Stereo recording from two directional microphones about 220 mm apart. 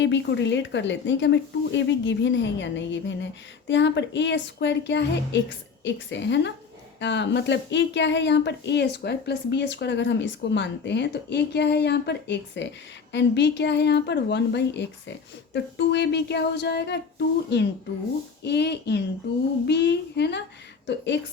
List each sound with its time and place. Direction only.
0.0 s speech: 55° left (ahead or behind)